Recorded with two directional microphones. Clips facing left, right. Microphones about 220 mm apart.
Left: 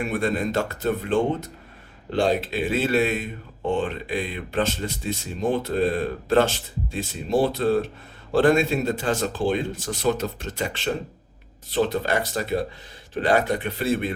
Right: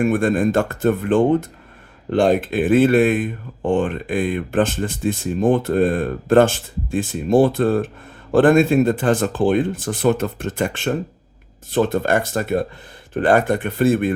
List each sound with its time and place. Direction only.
0.0 s speech: 50° right (ahead or behind)